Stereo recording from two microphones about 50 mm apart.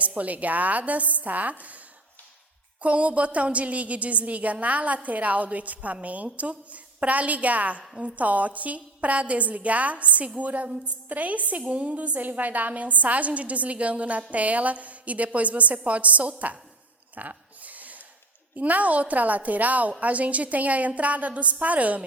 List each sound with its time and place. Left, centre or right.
0.0 s a woman's voice: right
2.8 s a woman's voice: right
17.2 s a sound: right
18.5 s a woman's voice: right